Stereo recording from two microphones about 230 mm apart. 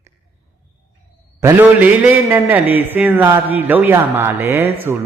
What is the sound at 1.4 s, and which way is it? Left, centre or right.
A man's voice, centre.